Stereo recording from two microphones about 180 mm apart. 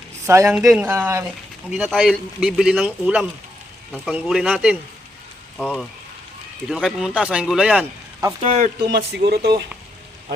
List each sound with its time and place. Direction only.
0.3 s speech: 15° right (ahead or behind)
1.7 s speech: centre (ahead or behind)
8.4 s speech: 40° right (ahead or behind)
8.9 s speech: 70° right (ahead or behind)